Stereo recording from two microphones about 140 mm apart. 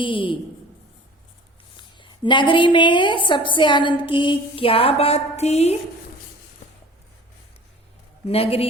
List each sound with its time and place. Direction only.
0.0 s a woman's voice: 35° left (ahead or behind)
1.7 s a woman's voice: 35° left (ahead or behind); by 5.7 s 50° left (ahead or behind)
8.3 s a woman's voice: 45° left (ahead or behind)